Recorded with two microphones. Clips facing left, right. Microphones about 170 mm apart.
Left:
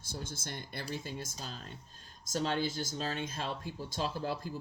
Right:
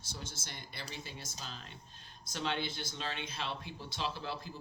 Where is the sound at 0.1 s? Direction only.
50° left (ahead or behind).